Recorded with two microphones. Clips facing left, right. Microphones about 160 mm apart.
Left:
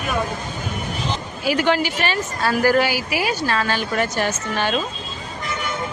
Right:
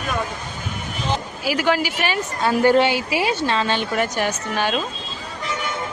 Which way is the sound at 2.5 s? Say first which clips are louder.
Right 2 dB; 25° right (ahead or behind).